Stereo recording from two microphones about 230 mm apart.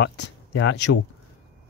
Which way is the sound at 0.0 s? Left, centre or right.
Left.